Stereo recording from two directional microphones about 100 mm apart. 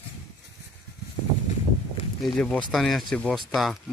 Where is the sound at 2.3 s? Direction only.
10° left (ahead or behind).